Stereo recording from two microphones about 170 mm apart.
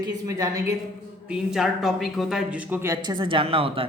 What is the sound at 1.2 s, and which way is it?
Speech, centre (ahead or behind).